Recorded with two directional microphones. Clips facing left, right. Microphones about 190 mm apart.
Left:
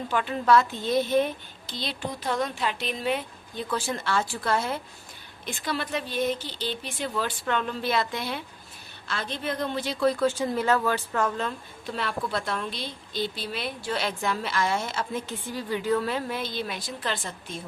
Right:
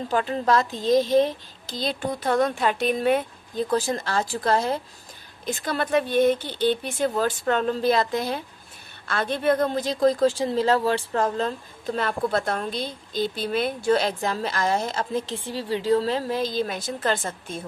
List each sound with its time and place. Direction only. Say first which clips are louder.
0.1 s a woman's voice: even; 35° right (ahead or behind)
1.8 s a woman's voice: right 6 dB; 50° right (ahead or behind)
9.0 s a woman's voice: right 9 dB; 55° right (ahead or behind)